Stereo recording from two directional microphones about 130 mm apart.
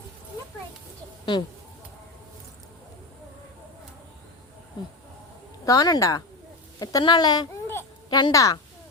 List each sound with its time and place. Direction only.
1.2 s speech: 35° left (ahead or behind)
5.6 s a woman's voice: 30° left (ahead or behind)